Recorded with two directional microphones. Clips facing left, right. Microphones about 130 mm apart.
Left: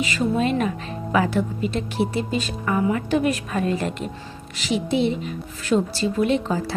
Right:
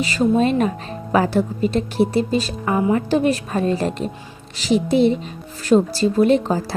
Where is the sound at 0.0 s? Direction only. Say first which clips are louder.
Right 5 dB; 35° right (ahead or behind).